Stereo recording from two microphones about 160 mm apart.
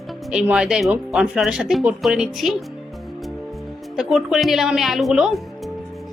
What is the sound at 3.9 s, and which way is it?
Speech, centre (ahead or behind).